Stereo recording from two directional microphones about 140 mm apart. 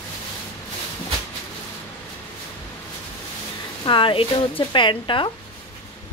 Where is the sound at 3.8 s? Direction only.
35° left (ahead or behind).